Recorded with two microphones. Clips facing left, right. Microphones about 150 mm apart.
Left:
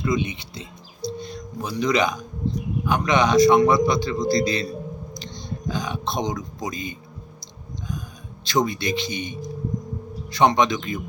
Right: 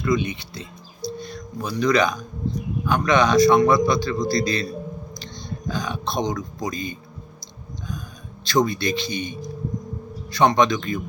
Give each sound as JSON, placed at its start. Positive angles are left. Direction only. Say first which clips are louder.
{"t": 0.0, "sound": "a man's voice", "louder": "right 2 dB", "side_deg": 20}
{"t": 8.4, "sound": "a man's voice", "louder": "right 2 dB", "side_deg": 20}